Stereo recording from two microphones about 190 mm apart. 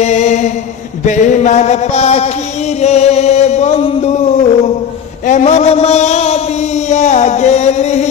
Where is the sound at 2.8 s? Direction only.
35° left (ahead or behind).